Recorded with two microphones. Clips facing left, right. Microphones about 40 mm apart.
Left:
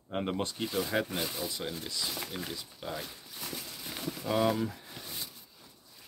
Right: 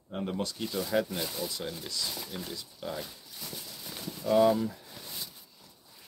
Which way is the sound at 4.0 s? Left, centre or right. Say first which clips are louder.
Right 5 dB; left.